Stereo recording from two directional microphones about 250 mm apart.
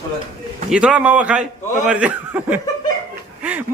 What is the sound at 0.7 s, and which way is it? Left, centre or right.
A man's voice, centre.